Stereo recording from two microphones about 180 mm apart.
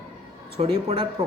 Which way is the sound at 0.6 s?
35° right (ahead or behind).